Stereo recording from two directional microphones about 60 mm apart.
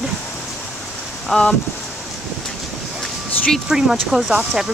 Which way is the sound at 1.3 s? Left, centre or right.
Centre.